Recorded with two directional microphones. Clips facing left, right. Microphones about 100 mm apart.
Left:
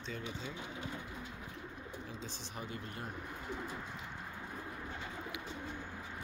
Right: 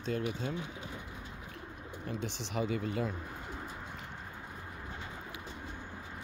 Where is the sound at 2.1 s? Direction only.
70° right (ahead or behind); by 3.1 s 90° right.